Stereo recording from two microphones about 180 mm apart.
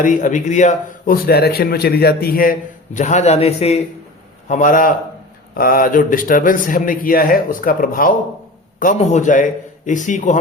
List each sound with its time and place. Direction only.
0.0 s a man's voice: 45° left (ahead or behind)